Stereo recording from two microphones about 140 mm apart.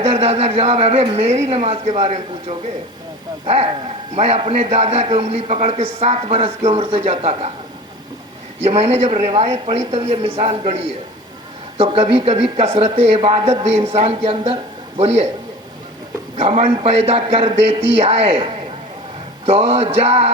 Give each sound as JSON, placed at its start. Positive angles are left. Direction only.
{"t": 0.0, "sound": "speech", "side_deg": -45}
{"t": 8.6, "sound": "speech", "side_deg": -50}
{"t": 16.4, "sound": "speech", "side_deg": -40}
{"t": 19.5, "sound": "speech", "side_deg": -50}